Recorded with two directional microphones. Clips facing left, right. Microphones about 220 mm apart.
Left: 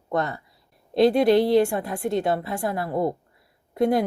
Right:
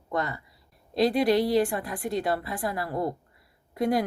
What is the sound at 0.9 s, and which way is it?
Speech, centre (ahead or behind).